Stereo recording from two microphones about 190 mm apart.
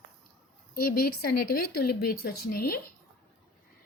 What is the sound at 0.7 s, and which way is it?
A woman's voice, 50° left (ahead or behind).